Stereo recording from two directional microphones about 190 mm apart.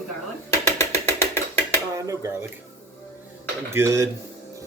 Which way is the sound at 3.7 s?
15° right (ahead or behind).